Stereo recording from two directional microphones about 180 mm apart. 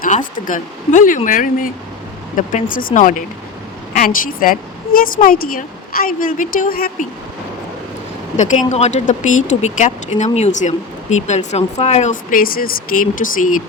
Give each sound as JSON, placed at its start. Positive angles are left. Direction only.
{"t": 0.0, "sound": "speech", "side_deg": 45}
{"t": 8.4, "sound": "speech", "side_deg": 40}